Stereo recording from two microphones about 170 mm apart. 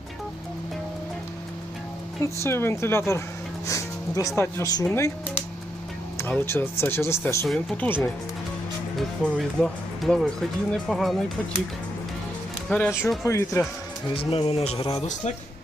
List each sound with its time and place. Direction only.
2.2 s speech: 15° left (ahead or behind)
3.7 s music: 20° left (ahead or behind)
4.4 s speech: 20° left (ahead or behind)
6.1 s speech: 10° left (ahead or behind)
9.0 s speech: 5° left (ahead or behind)
12.7 s speech: 10° left (ahead or behind)
14.2 s speech: 35° left (ahead or behind)